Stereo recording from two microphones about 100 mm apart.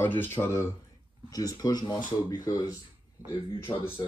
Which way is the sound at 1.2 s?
40° left (ahead or behind).